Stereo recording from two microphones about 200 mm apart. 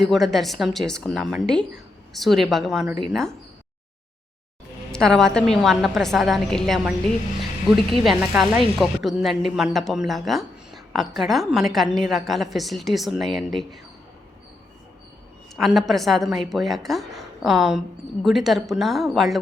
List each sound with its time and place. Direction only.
0.0 s a woman's voice: centre (ahead or behind)
4.9 s a woman's voice: centre (ahead or behind)
15.5 s a woman's voice: centre (ahead or behind)